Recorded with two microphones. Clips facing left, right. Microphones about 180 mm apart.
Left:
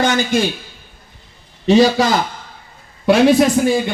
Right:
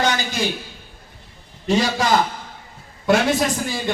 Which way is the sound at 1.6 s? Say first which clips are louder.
Left 8 dB; 75° left (ahead or behind).